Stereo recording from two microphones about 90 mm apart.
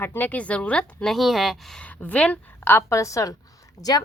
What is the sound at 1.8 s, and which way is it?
A woman's voice, 15° left (ahead or behind).